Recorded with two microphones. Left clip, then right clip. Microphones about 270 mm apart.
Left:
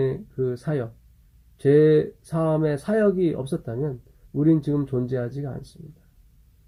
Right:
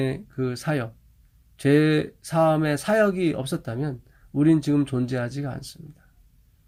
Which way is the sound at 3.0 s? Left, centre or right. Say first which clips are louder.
Left 2 dB; right.